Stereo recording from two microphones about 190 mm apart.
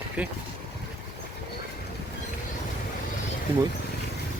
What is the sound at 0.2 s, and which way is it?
Speech, 5° right (ahead or behind).